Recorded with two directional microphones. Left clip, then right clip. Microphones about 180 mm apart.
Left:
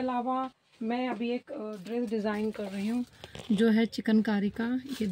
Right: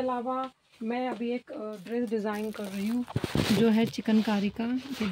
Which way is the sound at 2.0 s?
10° left (ahead or behind).